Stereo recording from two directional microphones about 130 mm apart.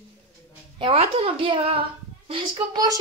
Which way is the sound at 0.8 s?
45° right (ahead or behind).